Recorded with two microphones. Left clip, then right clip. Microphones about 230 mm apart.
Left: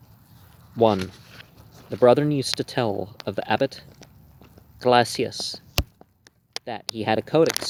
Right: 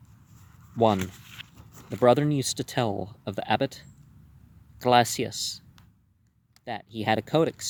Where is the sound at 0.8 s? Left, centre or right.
Right.